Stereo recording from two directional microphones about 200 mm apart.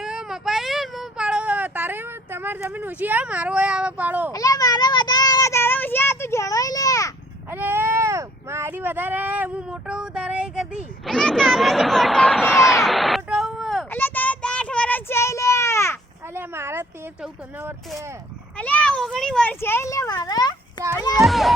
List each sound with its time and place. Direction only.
0.0 s child singing: 5° right (ahead or behind)
4.3 s child singing: 15° left (ahead or behind)
7.5 s a sound: 10° right (ahead or behind)
13.9 s child singing: 10° left (ahead or behind)
16.3 s a sound: 10° right (ahead or behind)
18.5 s speech: 5° left (ahead or behind)
21.2 s a child's voice: centre (ahead or behind)